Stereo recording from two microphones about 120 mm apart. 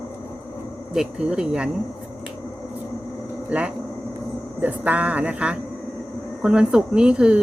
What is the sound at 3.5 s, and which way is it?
Speech, 10° right (ahead or behind).